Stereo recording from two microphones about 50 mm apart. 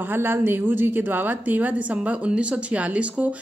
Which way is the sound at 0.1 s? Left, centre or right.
Right.